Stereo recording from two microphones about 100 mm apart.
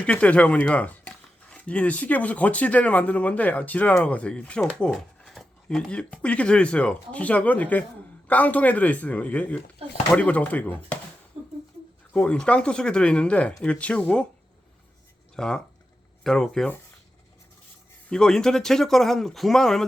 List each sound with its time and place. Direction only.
0.0 s speech: 15° left (ahead or behind)
4.9 s speech: centre (ahead or behind); by 10.9 s 15° left (ahead or behind)
12.1 s speech: 10° left (ahead or behind)
15.4 s speech: 5° left (ahead or behind)
18.1 s speech: 5° left (ahead or behind)